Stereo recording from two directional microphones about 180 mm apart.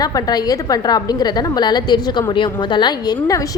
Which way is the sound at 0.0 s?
20° left (ahead or behind).